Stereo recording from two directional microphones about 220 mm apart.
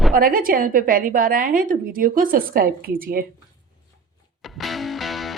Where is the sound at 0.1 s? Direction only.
40° right (ahead or behind).